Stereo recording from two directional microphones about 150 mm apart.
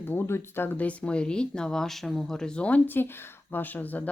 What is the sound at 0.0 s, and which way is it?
Speech, 15° left (ahead or behind).